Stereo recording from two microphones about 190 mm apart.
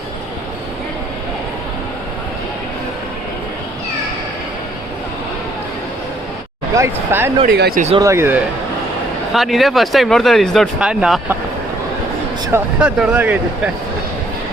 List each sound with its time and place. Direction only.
6.7 s speech: 15° right (ahead or behind)
7.4 s speech: 55° right (ahead or behind)
7.9 s speech: 15° right (ahead or behind)
9.3 s speech: centre (ahead or behind)
12.5 s speech: 10° right (ahead or behind)